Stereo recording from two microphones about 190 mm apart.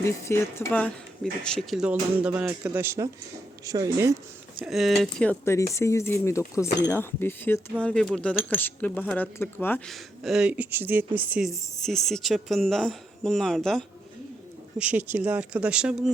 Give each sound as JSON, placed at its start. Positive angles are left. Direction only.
{"t": 0.0, "sound": "speech", "side_deg": 15}
{"t": 4.6, "sound": "speech", "side_deg": 0}
{"t": 14.8, "sound": "speech", "side_deg": -10}